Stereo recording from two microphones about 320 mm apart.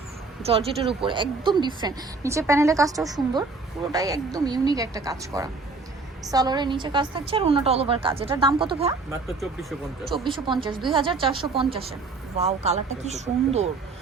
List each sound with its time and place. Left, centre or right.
0.4 s a woman's voice: centre
9.2 s speech: centre
10.2 s a woman's voice: centre